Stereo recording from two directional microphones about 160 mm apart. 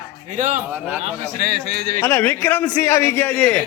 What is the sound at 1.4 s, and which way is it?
Speech, 90° right.